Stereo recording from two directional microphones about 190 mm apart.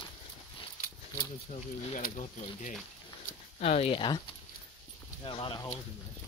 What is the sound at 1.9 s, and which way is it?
Speech, 40° left (ahead or behind).